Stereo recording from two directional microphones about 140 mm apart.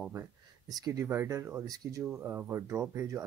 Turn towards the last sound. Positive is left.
turn(degrees=-20)  # may be behind; listen again after turning